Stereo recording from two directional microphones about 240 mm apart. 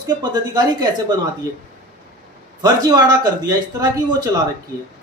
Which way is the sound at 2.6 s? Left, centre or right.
Centre.